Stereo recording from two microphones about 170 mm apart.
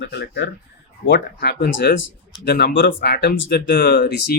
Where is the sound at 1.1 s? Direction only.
70° left (ahead or behind).